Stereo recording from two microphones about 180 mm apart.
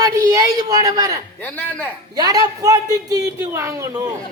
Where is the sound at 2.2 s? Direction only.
20° right (ahead or behind).